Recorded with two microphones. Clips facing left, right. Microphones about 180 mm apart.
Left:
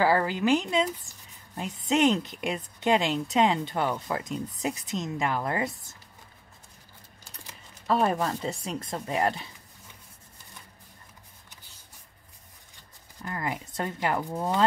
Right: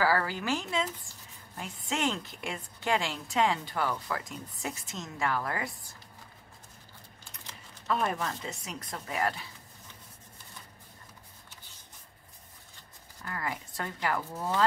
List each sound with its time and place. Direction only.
0.0 s a woman's voice: 20° left (ahead or behind)
1.1 s speech: 45° left (ahead or behind)
1.6 s a woman's voice: 20° left (ahead or behind)
7.8 s speech: 35° left (ahead or behind)
13.2 s a woman's voice: 20° left (ahead or behind)